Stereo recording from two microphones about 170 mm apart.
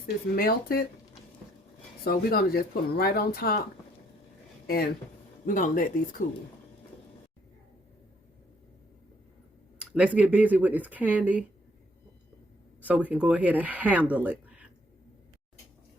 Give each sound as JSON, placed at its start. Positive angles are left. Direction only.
{"t": 0.3, "sound": "speech", "side_deg": 60}
{"t": 2.0, "sound": "speech", "side_deg": 65}
{"t": 5.5, "sound": "speech", "side_deg": 50}
{"t": 9.7, "sound": "speech", "side_deg": -5}
{"t": 12.8, "sound": "speech", "side_deg": -10}